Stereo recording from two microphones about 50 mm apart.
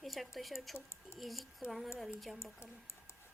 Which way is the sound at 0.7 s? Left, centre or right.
Left.